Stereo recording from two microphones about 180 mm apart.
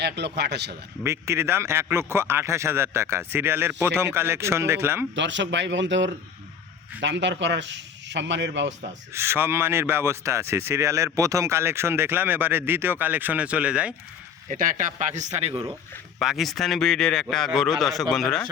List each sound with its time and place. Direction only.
0.0 s speech: 70° right (ahead or behind)
1.0 s speech: 15° right (ahead or behind)
5.1 s speech: 85° right
7.0 s speech: 80° right
9.1 s speech: 15° right (ahead or behind)
14.5 s speech: 50° right (ahead or behind)
16.2 s a man's voice: centre (ahead or behind)